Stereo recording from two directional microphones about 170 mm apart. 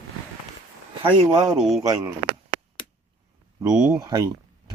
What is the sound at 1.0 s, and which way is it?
Speech, 25° right (ahead or behind).